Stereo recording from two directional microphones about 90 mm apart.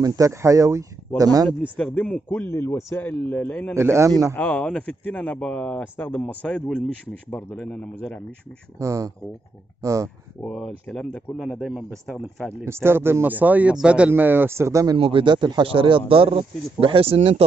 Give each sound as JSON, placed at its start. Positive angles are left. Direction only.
{"t": 0.0, "sound": "speech", "side_deg": -40}
{"t": 2.0, "sound": "speech", "side_deg": 15}
{"t": 2.3, "sound": "speech", "side_deg": 25}
{"t": 3.7, "sound": "speech", "side_deg": -30}
{"t": 4.4, "sound": "speech", "side_deg": 15}
{"t": 8.7, "sound": "speech", "side_deg": -35}
{"t": 10.5, "sound": "speech", "side_deg": 0}
{"t": 12.6, "sound": "a man's voice", "side_deg": -30}
{"t": 15.0, "sound": "speech", "side_deg": -80}
{"t": 16.8, "sound": "speech", "side_deg": -90}